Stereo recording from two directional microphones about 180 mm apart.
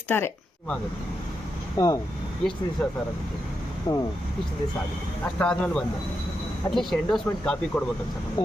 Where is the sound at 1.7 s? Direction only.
20° left (ahead or behind).